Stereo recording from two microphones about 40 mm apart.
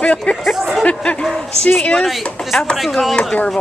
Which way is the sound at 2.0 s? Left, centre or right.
Centre.